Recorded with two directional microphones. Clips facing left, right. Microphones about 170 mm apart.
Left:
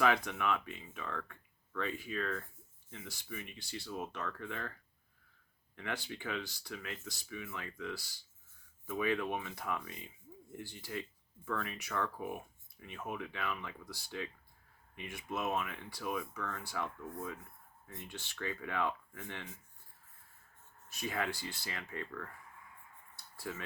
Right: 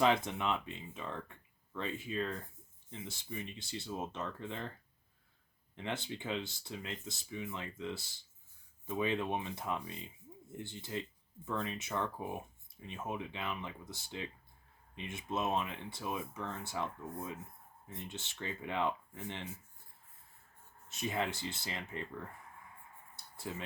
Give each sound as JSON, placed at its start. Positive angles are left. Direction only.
{"t": 0.0, "sound": "speech", "side_deg": -25}
{"t": 5.7, "sound": "speech", "side_deg": -25}
{"t": 20.8, "sound": "speech", "side_deg": -20}
{"t": 23.1, "sound": "a sound", "side_deg": -20}